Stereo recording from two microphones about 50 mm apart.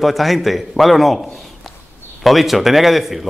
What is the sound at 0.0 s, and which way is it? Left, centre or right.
A man's voice, centre.